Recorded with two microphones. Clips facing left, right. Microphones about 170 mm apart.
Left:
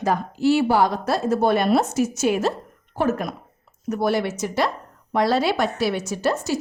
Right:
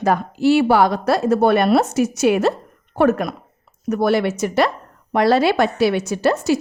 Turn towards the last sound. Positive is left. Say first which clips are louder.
# right 5 dB
turn(degrees=-70)  # may be behind; listen again after turning